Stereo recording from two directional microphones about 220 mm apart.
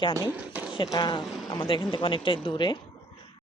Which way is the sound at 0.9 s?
20° left (ahead or behind).